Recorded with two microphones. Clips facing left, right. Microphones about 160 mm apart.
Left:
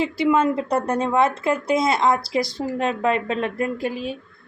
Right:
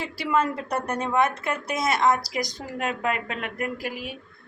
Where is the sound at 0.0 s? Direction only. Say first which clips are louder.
Left 6 dB; 25° left (ahead or behind).